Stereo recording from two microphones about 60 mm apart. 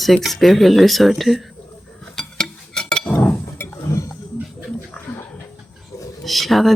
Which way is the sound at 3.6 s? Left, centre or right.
Left.